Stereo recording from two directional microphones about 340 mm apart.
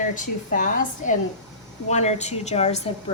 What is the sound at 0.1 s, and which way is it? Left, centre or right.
A woman's voice, left.